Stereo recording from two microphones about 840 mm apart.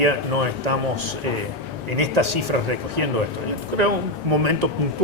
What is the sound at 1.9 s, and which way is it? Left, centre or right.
Speech, right.